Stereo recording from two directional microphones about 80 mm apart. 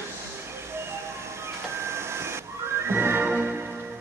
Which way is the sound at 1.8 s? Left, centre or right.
Right.